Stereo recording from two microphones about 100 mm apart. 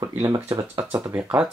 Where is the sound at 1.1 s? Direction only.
20° right (ahead or behind).